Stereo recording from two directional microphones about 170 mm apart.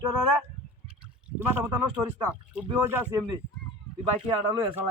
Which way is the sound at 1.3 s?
15° right (ahead or behind).